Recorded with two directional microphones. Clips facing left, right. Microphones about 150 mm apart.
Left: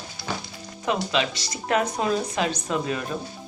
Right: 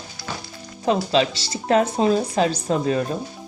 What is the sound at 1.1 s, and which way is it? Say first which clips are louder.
Speech: right 5 dB; 30° right (ahead or behind).